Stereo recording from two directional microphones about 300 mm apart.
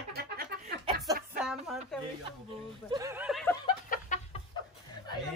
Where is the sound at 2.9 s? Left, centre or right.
Centre.